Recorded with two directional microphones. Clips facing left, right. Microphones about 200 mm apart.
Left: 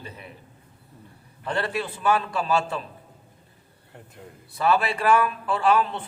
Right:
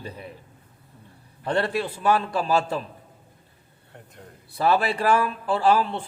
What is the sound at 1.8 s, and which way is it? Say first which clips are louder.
A man's voice: right 1 dB; 35° right (ahead or behind).